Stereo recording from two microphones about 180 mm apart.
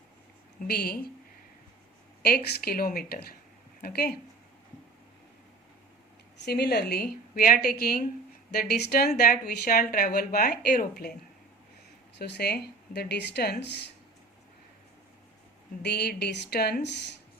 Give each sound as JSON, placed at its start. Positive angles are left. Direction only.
{"t": 0.7, "sound": "speech", "side_deg": 60}
{"t": 2.2, "sound": "speech", "side_deg": 60}
{"t": 6.4, "sound": "speech", "side_deg": 65}
{"t": 12.1, "sound": "speech", "side_deg": 70}
{"t": 15.8, "sound": "speech", "side_deg": 65}